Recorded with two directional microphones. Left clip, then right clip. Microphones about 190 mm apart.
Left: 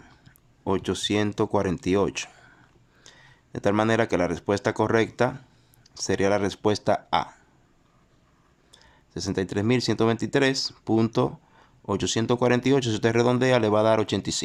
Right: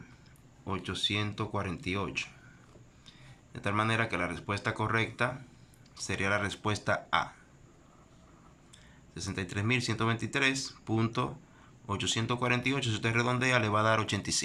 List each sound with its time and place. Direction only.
0.6 s speech: 35° left (ahead or behind)
8.7 s speech: 30° left (ahead or behind)